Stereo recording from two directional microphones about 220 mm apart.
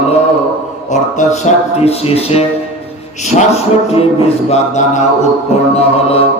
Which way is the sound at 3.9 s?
25° left (ahead or behind).